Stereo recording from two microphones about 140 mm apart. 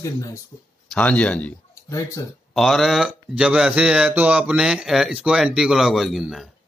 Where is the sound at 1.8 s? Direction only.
25° left (ahead or behind).